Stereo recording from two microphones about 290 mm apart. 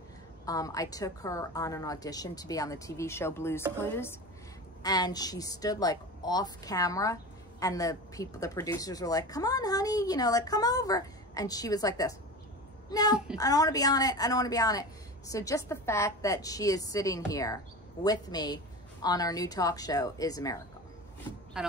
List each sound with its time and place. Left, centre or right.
0.5 s a woman's voice: centre
21.6 s speech: centre